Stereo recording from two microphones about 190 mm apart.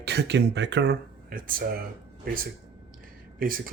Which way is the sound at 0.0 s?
60° right (ahead or behind).